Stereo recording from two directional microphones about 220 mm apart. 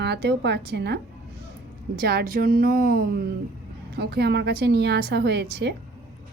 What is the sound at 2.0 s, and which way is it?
A woman's voice, 45° right (ahead or behind).